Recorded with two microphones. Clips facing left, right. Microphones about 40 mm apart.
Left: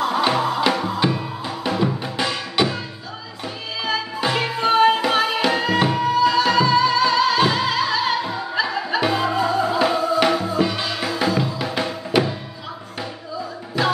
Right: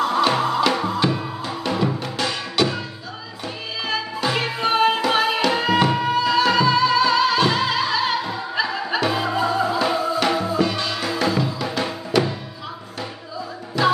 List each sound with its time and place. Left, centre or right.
0.0 s music: centre
2.0 s music: centre
4.3 s music: centre
12.1 s music: centre
13.8 s music: centre